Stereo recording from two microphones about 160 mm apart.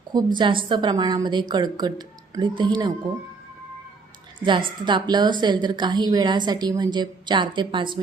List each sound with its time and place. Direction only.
0.3 s a woman's voice: 30° right (ahead or behind)
4.4 s a woman's voice: 30° right (ahead or behind)